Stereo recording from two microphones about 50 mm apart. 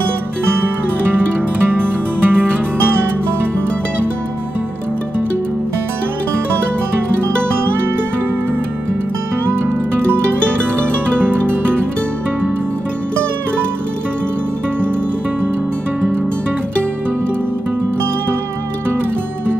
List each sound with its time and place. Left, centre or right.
1.7 s music: right
11.2 s music: right